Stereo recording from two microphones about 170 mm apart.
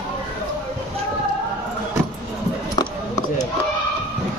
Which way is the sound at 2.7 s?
20° left (ahead or behind).